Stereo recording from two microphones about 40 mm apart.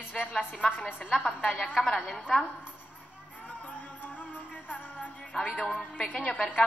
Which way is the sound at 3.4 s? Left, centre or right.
Left.